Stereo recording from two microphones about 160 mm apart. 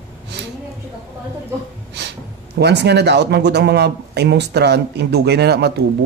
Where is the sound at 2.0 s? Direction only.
90° right.